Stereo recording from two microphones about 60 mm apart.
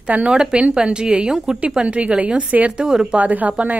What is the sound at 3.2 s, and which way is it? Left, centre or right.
Speech, right.